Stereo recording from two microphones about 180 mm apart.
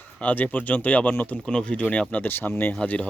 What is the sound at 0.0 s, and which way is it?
Speech, 10° left (ahead or behind).